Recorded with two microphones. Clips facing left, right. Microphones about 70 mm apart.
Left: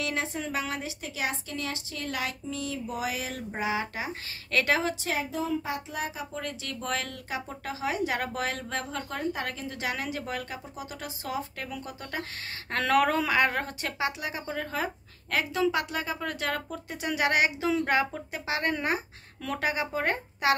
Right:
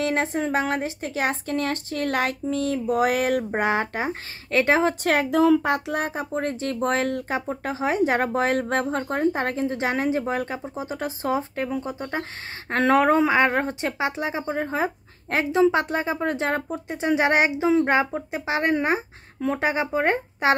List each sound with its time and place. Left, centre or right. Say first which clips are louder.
0.0 s a woman's voice: right 8 dB; right
5.0 s speech: right 12 dB; right